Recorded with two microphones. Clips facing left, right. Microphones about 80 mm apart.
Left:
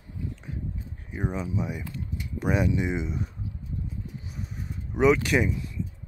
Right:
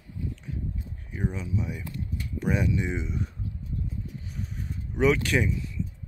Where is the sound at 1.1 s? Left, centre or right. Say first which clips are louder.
Left 1 dB; left.